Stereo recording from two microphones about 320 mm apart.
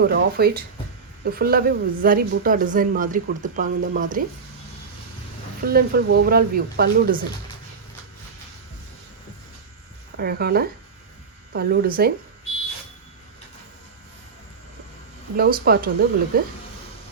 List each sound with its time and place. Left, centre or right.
0.0 s a woman's voice: right
5.6 s a woman's voice: right
10.2 s a woman's voice: right
15.4 s a woman's voice: right